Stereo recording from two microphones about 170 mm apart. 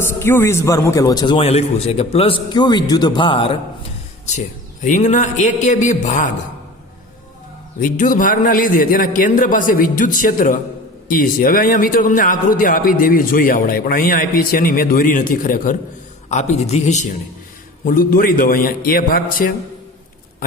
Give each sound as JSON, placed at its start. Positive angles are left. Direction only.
{"t": 0.0, "sound": "speech", "side_deg": 15}
{"t": 1.4, "sound": "a man's voice", "side_deg": 40}
{"t": 4.4, "sound": "a man's voice", "side_deg": 45}
{"t": 7.8, "sound": "a man's voice", "side_deg": 50}
{"t": 16.3, "sound": "a man's voice", "side_deg": 40}
{"t": 17.8, "sound": "a man's voice", "side_deg": 60}